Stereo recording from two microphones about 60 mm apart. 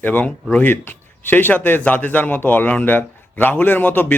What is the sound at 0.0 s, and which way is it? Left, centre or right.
Speech, left.